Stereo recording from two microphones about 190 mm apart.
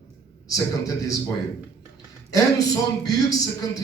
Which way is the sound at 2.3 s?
20° left (ahead or behind).